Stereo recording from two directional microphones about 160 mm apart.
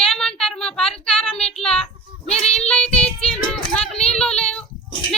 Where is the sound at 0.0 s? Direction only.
5° left (ahead or behind).